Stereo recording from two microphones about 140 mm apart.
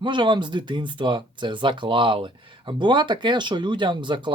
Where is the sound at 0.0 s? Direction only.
35° right (ahead or behind).